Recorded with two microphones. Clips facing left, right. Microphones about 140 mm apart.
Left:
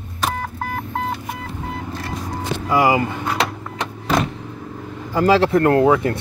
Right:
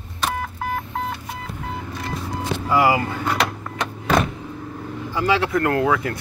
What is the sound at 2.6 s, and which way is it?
Speech, 15° left (ahead or behind).